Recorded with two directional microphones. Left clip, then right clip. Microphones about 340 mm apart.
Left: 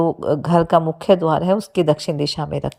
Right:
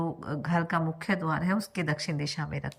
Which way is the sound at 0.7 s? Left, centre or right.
Centre.